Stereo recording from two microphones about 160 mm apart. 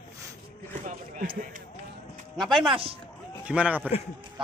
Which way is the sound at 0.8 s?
55° right (ahead or behind).